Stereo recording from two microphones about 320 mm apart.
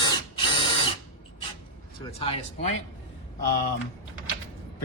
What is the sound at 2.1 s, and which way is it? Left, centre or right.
Speech, centre.